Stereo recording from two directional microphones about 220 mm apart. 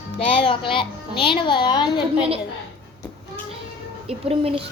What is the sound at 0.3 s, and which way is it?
A child's voice, 25° left (ahead or behind).